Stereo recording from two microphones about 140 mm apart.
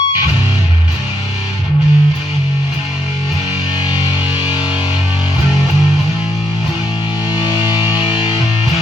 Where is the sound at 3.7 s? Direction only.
30° left (ahead or behind).